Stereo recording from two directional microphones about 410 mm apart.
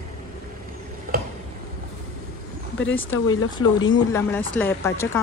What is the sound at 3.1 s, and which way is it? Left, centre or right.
Speech, left.